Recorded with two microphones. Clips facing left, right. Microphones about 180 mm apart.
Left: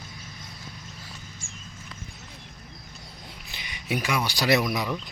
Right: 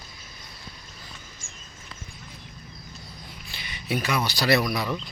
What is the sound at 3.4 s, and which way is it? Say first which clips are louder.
Speech: right 1 dB; 15° left (ahead or behind).